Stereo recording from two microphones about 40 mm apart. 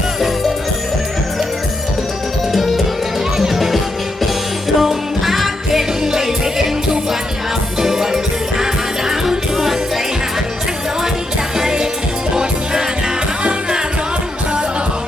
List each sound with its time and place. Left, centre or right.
2.5 s music: centre
4.8 s music: centre
7.8 s music: centre
11.5 s music: centre